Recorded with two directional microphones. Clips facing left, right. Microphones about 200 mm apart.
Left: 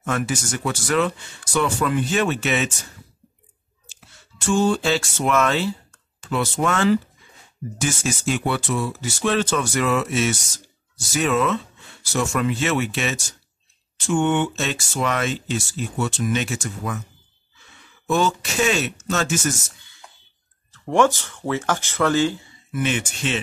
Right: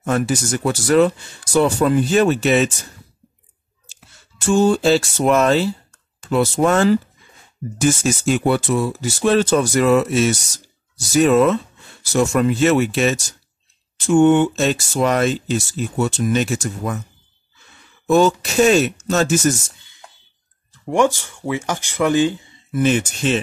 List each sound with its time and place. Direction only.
0.0 s speech: 35° right (ahead or behind)
3.9 s a sound: 40° right (ahead or behind)
4.5 s speech: 40° right (ahead or behind)
18.0 s speech: 40° right (ahead or behind)
20.7 s speech: 15° right (ahead or behind)
22.7 s speech: 40° right (ahead or behind)